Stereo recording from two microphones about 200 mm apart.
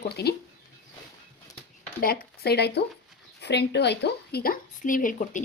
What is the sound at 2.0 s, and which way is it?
Speech, 50° left (ahead or behind).